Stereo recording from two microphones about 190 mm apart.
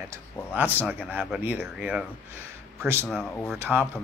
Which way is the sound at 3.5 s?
10° right (ahead or behind).